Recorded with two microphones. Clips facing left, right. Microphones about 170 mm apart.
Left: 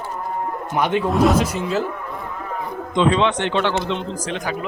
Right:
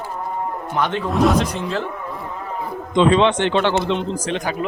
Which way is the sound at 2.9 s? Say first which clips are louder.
Right 3 dB; 25° right (ahead or behind).